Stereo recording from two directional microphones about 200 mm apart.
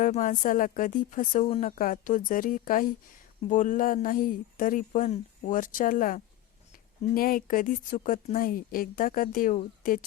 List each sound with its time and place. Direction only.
0.0 s a woman's voice: 40° left (ahead or behind)